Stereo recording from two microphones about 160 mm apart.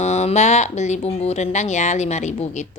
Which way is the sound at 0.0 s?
45° left (ahead or behind).